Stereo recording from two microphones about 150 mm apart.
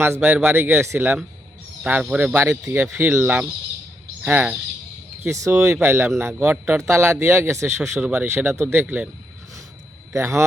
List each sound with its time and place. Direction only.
0.0 s a man's voice: 15° right (ahead or behind)
10.2 s a man's voice: 20° right (ahead or behind)